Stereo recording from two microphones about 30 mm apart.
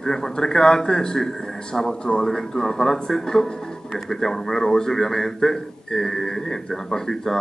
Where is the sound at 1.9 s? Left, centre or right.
Left.